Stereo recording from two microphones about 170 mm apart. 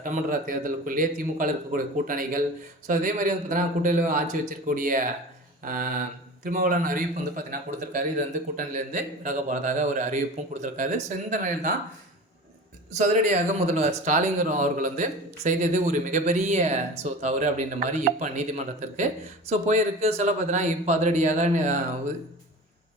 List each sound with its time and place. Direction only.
0.0 s speech: 50° right (ahead or behind)
13.0 s speech: 45° right (ahead or behind)